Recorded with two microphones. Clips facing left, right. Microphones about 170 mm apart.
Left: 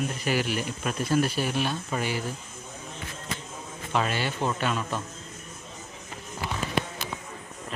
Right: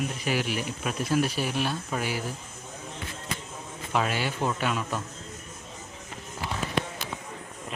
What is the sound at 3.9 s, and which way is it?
Speech, 5° right (ahead or behind).